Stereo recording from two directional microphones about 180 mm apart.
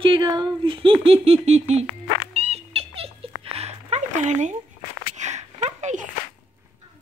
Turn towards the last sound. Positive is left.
turn(degrees=-40)  # may be behind; listen again after turning